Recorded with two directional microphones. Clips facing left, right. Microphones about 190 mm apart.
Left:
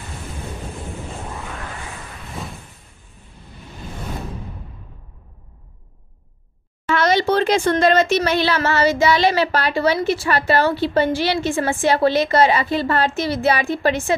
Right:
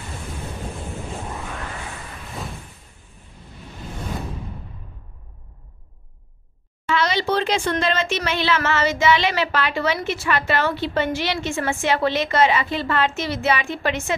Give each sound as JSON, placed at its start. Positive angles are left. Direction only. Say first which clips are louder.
{"t": 6.9, "sound": "a woman's voice", "louder": "left 4 dB", "side_deg": 50}